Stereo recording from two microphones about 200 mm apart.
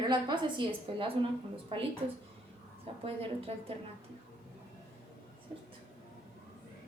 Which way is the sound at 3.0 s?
30° right (ahead or behind).